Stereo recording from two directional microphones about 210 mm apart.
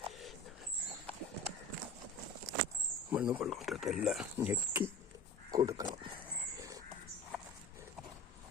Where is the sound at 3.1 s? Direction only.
5° right (ahead or behind).